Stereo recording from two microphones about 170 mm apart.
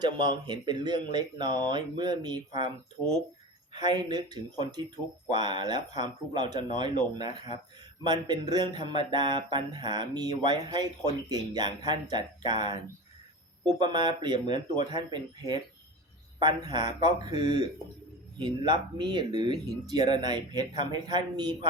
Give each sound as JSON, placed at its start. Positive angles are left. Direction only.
{"t": 0.0, "sound": "speech", "side_deg": -25}
{"t": 3.8, "sound": "speech", "side_deg": -25}
{"t": 13.7, "sound": "speech", "side_deg": -25}